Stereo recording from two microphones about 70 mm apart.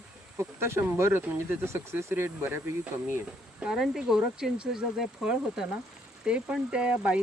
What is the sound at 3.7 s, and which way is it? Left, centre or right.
Speech, centre.